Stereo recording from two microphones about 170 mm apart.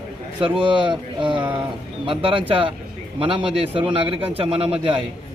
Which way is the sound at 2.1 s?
30° right (ahead or behind).